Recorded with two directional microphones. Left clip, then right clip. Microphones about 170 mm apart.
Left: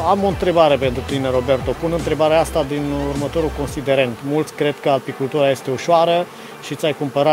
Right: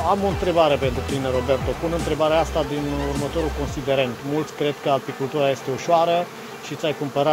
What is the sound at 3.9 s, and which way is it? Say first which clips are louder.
Speech: left 5 dB; 60° left (ahead or behind).